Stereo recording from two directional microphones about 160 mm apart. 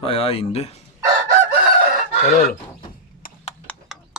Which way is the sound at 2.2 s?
50° left (ahead or behind).